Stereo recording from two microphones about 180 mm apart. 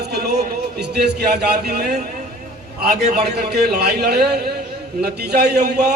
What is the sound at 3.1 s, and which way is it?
A man's voice, 65° right (ahead or behind).